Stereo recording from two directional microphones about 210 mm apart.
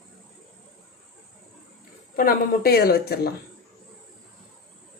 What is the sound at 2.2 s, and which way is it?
Speech, 45° left (ahead or behind).